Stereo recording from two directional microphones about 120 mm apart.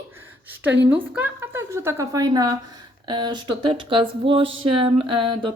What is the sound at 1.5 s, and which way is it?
A woman's voice, 20° right (ahead or behind).